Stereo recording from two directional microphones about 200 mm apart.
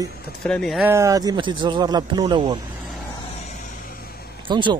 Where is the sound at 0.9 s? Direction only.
15° right (ahead or behind).